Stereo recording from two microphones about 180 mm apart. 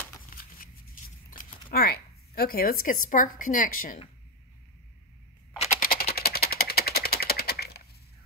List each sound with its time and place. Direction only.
0.3 s a sound: 50° left (ahead or behind)
1.3 s speech: 55° left (ahead or behind)
5.8 s typing: 55° left (ahead or behind)
6.1 s typewriter: 60° left (ahead or behind)